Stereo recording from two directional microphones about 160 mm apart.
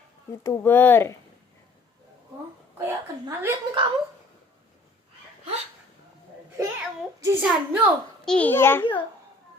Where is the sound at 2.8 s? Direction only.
15° right (ahead or behind).